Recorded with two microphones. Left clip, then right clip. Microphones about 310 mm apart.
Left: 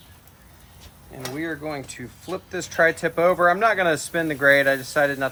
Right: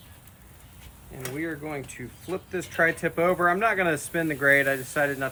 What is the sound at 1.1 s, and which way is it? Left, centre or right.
Speech, left.